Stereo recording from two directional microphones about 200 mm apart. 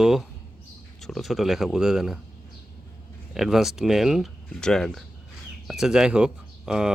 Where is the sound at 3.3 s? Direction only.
Centre (ahead or behind).